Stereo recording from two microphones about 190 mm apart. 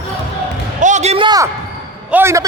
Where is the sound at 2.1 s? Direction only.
10° right (ahead or behind).